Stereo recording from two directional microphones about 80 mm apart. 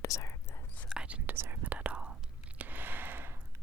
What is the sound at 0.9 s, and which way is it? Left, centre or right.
Whispering, centre.